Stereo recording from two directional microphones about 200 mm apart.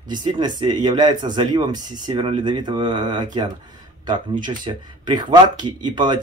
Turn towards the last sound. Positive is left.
turn(degrees=-20)  # may be behind; listen again after turning